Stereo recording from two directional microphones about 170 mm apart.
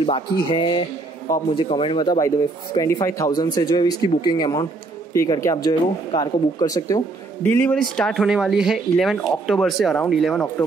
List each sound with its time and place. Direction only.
0.5 s speech: 30° left (ahead or behind)
7.4 s speech: 10° left (ahead or behind)